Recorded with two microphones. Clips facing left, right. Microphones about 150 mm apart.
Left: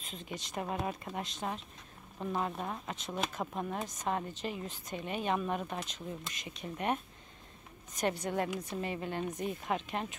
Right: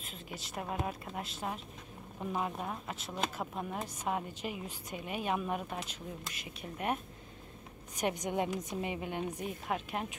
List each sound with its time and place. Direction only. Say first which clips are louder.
0.0 s a woman's voice: left 2 dB; 5° right (ahead or behind)